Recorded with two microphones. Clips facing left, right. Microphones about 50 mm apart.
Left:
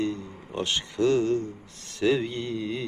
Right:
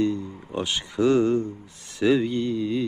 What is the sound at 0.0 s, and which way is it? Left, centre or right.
Speech, centre.